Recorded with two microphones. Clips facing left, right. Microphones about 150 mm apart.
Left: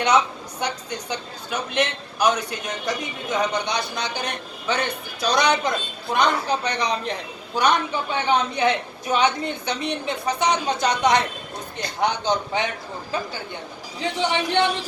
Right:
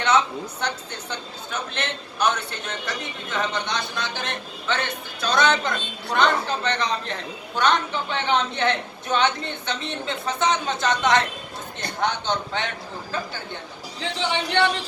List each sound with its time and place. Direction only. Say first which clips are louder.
0.6 s a man's voice: left 6 dB; 10° left (ahead or behind)
14.0 s a man's voice: left 3 dB; 15° left (ahead or behind)